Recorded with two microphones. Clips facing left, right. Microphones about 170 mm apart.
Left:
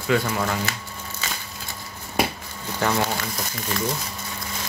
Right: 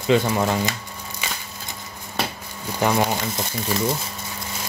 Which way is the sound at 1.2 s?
15° right (ahead or behind).